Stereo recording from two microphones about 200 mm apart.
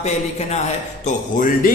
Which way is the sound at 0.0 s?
35° left (ahead or behind).